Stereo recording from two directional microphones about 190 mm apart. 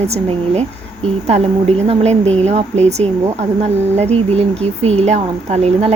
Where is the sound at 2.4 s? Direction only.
35° right (ahead or behind).